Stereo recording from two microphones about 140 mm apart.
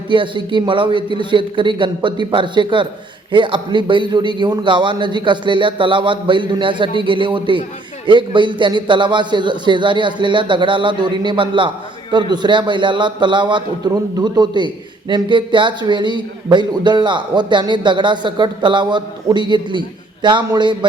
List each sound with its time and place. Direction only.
0.1 s a man's voice: 35° right (ahead or behind)